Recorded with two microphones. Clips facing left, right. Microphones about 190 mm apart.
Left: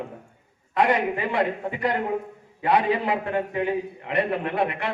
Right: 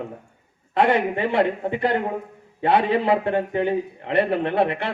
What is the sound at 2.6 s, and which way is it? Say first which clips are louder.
A man's voice: right 3 dB; 30° right (ahead or behind).